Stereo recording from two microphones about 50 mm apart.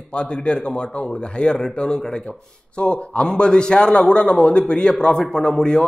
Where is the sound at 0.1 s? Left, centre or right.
Centre.